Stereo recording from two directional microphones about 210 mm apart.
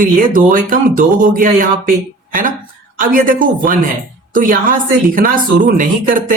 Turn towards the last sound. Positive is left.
turn(degrees=-40)  # may be behind; listen again after turning